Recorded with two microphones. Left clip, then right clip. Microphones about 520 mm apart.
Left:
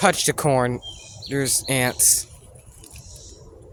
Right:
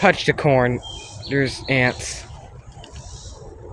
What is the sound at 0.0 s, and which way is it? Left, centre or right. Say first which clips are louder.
A man's voice: right 3 dB; left.